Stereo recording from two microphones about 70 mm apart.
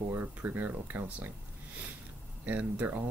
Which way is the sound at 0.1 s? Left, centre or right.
Right.